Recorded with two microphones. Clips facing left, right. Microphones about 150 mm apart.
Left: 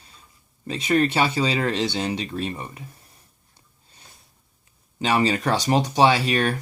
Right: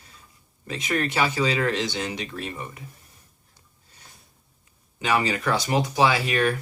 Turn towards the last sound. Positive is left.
turn(degrees=35)  # may be behind; listen again after turning